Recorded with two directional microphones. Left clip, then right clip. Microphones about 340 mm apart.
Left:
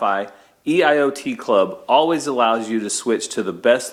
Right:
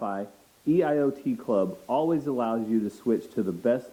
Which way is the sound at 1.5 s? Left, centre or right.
Centre.